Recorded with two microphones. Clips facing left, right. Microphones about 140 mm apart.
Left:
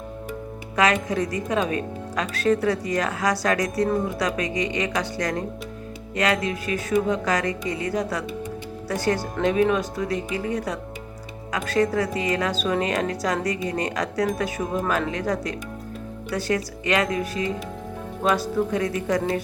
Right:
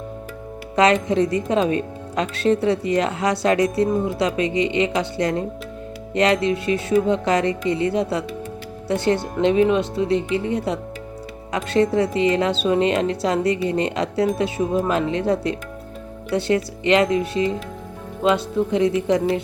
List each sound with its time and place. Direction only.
1.0 s speech: 30° right (ahead or behind)